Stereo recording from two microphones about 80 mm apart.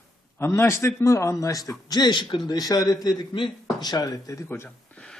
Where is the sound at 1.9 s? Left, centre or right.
Left.